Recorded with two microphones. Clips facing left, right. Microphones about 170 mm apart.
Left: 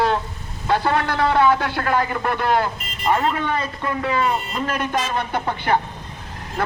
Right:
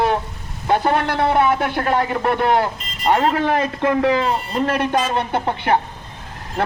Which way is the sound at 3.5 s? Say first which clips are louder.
Right 6 dB; 90° right.